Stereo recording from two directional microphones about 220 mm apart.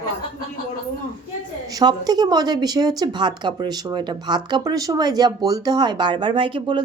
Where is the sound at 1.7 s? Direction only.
20° right (ahead or behind).